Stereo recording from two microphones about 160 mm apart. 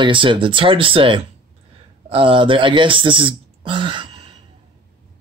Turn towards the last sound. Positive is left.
turn(degrees=-30)  # may be behind; listen again after turning